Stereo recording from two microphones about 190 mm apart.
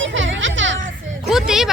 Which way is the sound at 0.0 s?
80° right.